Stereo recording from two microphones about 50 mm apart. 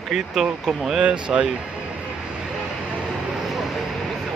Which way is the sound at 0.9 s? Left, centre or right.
Right.